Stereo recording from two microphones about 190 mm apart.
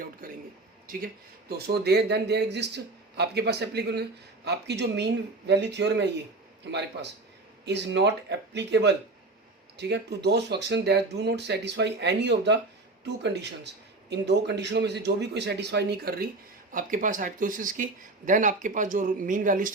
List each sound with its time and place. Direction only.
0.9 s speech: 55° right (ahead or behind)
16.7 s speech: 45° right (ahead or behind)